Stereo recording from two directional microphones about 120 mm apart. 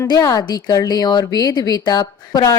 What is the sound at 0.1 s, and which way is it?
A woman's voice, 30° left (ahead or behind).